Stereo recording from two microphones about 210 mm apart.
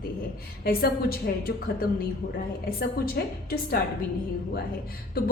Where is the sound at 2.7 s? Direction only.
45° left (ahead or behind).